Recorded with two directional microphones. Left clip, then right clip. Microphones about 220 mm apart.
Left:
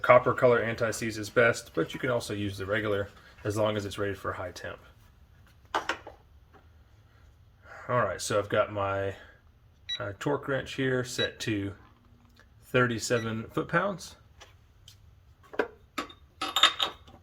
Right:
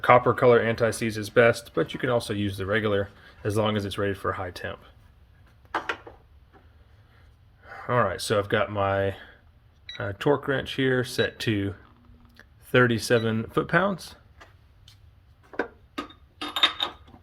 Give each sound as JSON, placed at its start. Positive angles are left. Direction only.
{"t": 0.0, "sound": "speech", "side_deg": -40}
{"t": 7.7, "sound": "speech", "side_deg": -40}